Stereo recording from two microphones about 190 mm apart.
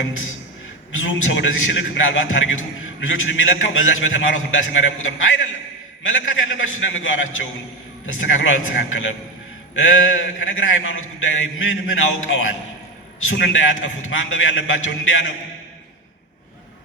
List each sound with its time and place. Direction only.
0.0 s a man's voice: 90° left